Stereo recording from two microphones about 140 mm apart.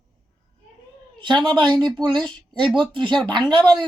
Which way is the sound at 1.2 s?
30° right (ahead or behind).